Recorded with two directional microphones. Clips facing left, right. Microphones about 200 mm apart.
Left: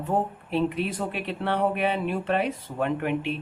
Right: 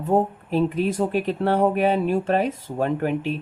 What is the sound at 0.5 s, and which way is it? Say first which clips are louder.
Speech: right 4 dB; 45° right (ahead or behind).